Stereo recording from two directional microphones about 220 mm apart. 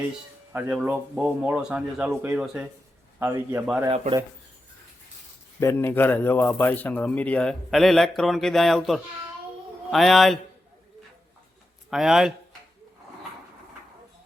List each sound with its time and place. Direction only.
0.5 s a man's voice: 5° right (ahead or behind)
3.9 s speech: 30° right (ahead or behind)
5.5 s speech: 10° left (ahead or behind)
11.9 s speech: centre (ahead or behind)